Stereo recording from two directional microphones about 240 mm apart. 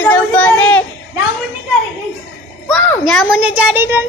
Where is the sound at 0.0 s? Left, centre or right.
Centre.